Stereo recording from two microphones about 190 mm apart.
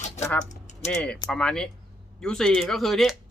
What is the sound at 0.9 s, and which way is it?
Speech, 5° left (ahead or behind).